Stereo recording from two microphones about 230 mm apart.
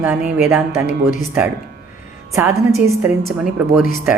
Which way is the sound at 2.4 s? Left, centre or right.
Centre.